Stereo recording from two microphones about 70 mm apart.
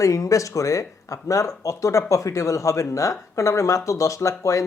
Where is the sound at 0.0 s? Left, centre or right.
Left.